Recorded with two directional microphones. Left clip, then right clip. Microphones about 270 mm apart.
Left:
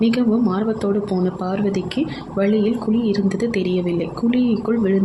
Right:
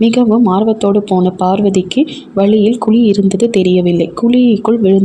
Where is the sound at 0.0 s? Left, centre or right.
Right.